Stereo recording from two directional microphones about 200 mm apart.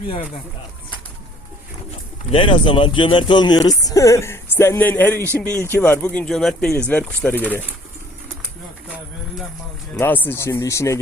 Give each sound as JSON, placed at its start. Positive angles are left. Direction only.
{"t": 2.3, "sound": "speech", "side_deg": 25}
{"t": 9.9, "sound": "speech", "side_deg": 10}